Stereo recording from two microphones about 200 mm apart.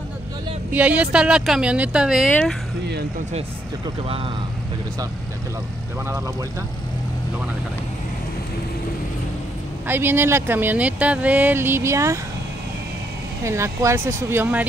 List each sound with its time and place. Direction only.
0.7 s speech: 10° right (ahead or behind)
3.3 s speech: 30° right (ahead or behind)
6.0 s speech: 15° right (ahead or behind)
9.8 s speech: 10° right (ahead or behind)
13.4 s speech: 15° right (ahead or behind)